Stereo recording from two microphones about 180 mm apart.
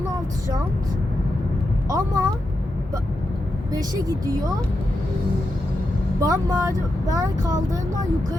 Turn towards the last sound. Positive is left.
turn(degrees=-20)  # may be behind; listen again after turning